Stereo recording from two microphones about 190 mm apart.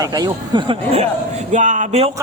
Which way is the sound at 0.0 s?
20° right (ahead or behind).